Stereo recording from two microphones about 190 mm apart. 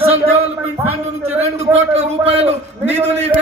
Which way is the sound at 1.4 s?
35° right (ahead or behind).